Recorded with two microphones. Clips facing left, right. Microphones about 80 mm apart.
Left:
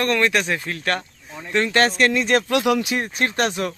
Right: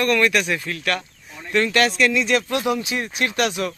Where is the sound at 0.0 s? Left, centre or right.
Left.